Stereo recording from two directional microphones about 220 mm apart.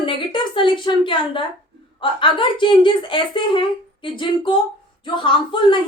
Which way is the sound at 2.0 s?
20° left (ahead or behind).